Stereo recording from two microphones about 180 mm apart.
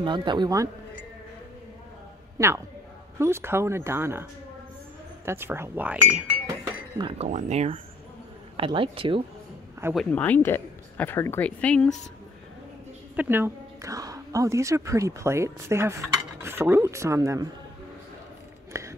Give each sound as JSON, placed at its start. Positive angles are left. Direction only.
{"t": 0.0, "sound": "a man's voice", "side_deg": -25}
{"t": 2.3, "sound": "speech", "side_deg": -15}
{"t": 7.0, "sound": "a man's voice", "side_deg": -30}
{"t": 7.2, "sound": "a man's voice", "side_deg": -40}
{"t": 9.9, "sound": "speech", "side_deg": 10}
{"t": 13.1, "sound": "speech", "side_deg": -10}
{"t": 18.7, "sound": "a sound", "side_deg": -15}